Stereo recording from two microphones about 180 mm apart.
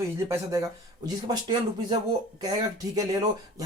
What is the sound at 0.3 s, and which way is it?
Speech, 20° right (ahead or behind).